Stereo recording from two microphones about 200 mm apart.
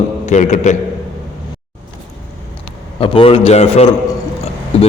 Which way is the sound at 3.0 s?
25° left (ahead or behind).